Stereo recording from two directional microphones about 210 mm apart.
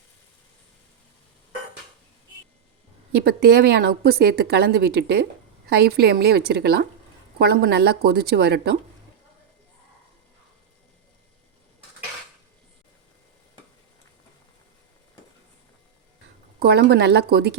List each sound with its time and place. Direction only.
3.1 s a woman's voice: 50° right (ahead or behind)
16.6 s a woman's voice: 50° right (ahead or behind)